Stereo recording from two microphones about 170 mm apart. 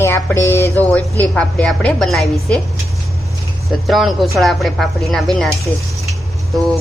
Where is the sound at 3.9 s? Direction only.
Centre (ahead or behind).